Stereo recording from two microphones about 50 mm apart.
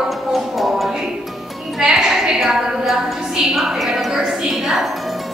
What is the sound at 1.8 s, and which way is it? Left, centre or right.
A woman's voice, centre.